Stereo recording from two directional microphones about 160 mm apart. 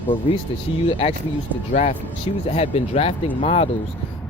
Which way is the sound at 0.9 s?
40° left (ahead or behind).